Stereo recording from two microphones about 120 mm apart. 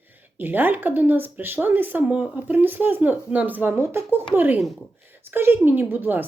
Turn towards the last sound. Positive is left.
turn(degrees=-15)  # may be behind; listen again after turning